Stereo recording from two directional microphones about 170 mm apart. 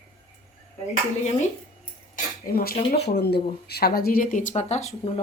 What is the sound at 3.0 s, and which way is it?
Speech, 75° left (ahead or behind).